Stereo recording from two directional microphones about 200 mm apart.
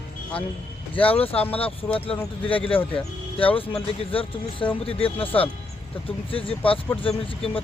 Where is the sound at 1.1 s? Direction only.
30° left (ahead or behind).